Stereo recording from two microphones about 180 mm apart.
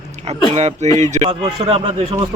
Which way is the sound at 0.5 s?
35° right (ahead or behind).